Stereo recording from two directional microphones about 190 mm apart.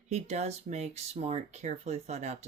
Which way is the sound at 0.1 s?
35° right (ahead or behind).